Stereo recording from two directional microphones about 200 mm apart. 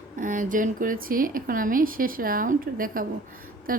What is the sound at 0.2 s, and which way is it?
A woman's voice, 40° right (ahead or behind).